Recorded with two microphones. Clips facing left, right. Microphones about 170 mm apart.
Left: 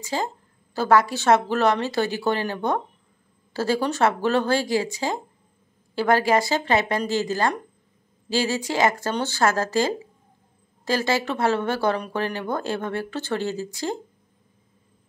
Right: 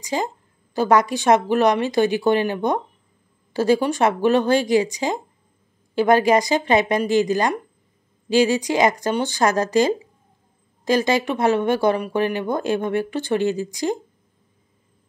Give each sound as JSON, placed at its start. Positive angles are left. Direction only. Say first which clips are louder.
{"t": 0.0, "sound": "speech", "louder": "right 3 dB", "side_deg": -15}